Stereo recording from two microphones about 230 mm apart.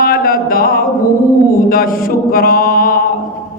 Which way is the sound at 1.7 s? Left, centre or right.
Left.